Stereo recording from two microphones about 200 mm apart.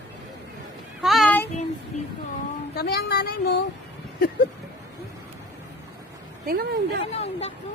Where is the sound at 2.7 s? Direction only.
55° left (ahead or behind).